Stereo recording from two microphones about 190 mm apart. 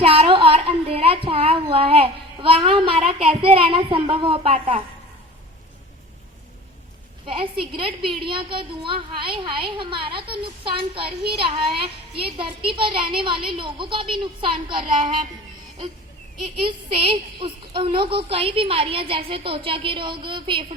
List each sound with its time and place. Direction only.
0.0 s a sound: 30° right (ahead or behind)
7.3 s a woman's voice: 25° right (ahead or behind)
16.6 s a woman's voice: 30° right (ahead or behind)